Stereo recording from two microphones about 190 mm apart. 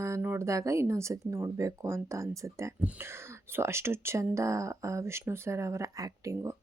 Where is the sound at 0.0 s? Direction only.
10° right (ahead or behind).